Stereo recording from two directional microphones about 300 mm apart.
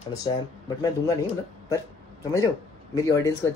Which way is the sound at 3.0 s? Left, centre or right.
Centre.